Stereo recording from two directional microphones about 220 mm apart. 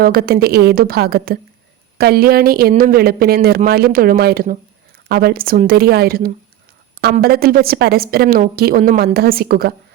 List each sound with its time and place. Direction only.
0.0 s a woman's voice: 45° right (ahead or behind)